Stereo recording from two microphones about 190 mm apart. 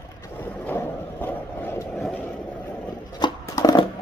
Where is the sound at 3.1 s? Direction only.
20° left (ahead or behind).